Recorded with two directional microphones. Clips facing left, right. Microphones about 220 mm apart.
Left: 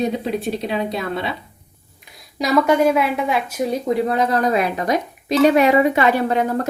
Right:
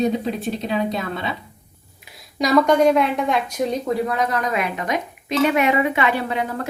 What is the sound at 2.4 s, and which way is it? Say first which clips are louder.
A woman's voice: even; centre (ahead or behind).